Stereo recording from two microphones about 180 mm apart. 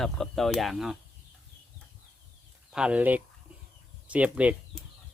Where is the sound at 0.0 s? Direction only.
Centre (ahead or behind).